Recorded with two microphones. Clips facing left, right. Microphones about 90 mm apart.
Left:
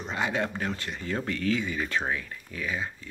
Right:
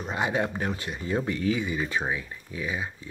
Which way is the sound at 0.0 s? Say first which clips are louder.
Right 2 dB; 15° right (ahead or behind).